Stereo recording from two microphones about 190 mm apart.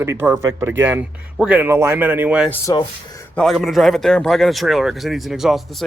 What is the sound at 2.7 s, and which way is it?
Speech, 20° left (ahead or behind).